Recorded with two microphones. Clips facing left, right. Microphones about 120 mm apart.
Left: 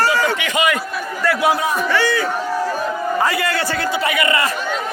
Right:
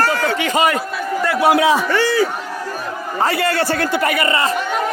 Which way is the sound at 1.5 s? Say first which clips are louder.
Right 6 dB; 85° right.